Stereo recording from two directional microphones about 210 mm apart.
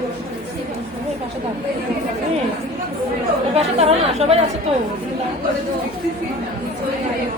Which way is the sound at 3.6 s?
30° right (ahead or behind).